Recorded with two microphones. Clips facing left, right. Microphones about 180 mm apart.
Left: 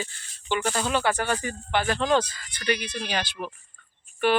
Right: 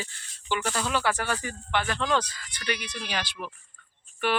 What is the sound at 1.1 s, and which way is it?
Speech, 5° right (ahead or behind).